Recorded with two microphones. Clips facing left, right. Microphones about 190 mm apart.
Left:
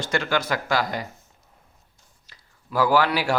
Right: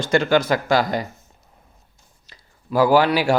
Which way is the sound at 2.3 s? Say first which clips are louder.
Right 8 dB; 15° right (ahead or behind).